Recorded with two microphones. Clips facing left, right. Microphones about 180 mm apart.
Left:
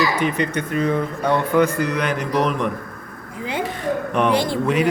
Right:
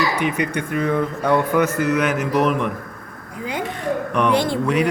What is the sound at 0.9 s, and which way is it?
Mantra, 20° left (ahead or behind).